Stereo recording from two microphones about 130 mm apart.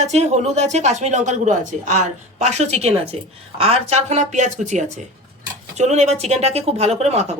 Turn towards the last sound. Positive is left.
turn(degrees=-55)  # may be behind; listen again after turning